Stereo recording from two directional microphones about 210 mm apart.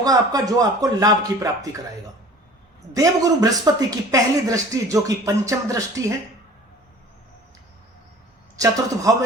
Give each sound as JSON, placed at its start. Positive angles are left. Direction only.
{"t": 0.0, "sound": "speech", "side_deg": -15}
{"t": 2.9, "sound": "speech", "side_deg": -15}
{"t": 8.5, "sound": "speech", "side_deg": -15}